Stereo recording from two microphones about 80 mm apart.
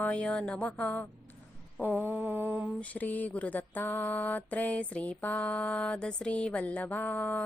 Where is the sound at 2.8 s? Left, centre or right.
Centre.